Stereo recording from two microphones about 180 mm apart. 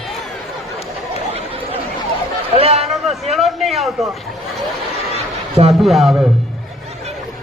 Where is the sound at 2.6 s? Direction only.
35° right (ahead or behind).